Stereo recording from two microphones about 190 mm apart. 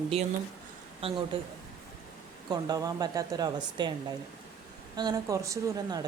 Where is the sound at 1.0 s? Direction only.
30° right (ahead or behind).